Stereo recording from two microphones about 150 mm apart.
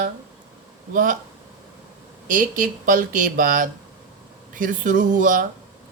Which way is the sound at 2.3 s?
60° right (ahead or behind).